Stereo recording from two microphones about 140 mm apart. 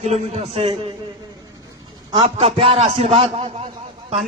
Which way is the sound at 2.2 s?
45° right (ahead or behind).